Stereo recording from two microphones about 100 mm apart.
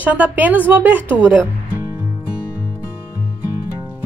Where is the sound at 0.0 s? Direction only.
15° right (ahead or behind).